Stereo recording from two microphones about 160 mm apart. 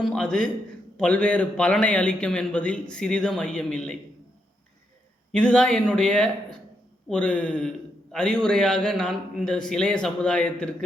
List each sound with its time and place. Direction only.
0.0 s a man's voice: 5° left (ahead or behind)
5.3 s a man's voice: 5° left (ahead or behind)